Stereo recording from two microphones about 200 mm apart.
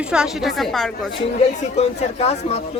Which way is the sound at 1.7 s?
35° left (ahead or behind).